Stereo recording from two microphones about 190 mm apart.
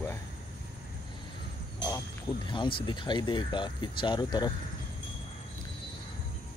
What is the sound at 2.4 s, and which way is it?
Speech, 25° left (ahead or behind).